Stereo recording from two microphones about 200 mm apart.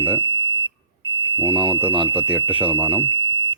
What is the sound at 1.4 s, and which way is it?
Speech, 10° right (ahead or behind).